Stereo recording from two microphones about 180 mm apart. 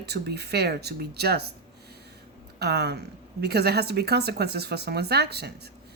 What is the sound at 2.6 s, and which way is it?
Speech, 65° right (ahead or behind).